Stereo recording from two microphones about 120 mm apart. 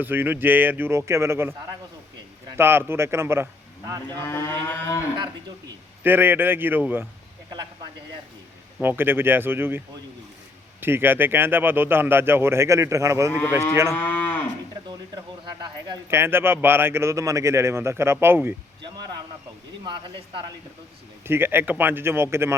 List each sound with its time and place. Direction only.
0.0 s speech: 15° right (ahead or behind)
2.6 s a man's voice: 20° right (ahead or behind)
4.2 s cattle: 20° left (ahead or behind)
6.0 s speech: 15° right (ahead or behind)
7.5 s a sound: 35° right (ahead or behind)
8.8 s a man's voice: 15° right (ahead or behind)
13.9 s cattle: 15° left (ahead or behind)
16.0 s a man's voice: 20° right (ahead or behind)
18.8 s speech: 35° right (ahead or behind)
21.2 s a man's voice: 20° right (ahead or behind)